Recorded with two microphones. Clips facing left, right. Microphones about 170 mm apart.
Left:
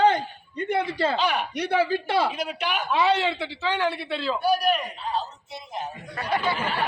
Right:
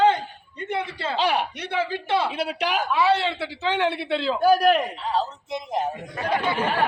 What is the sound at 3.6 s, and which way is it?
Speech, 20° right (ahead or behind).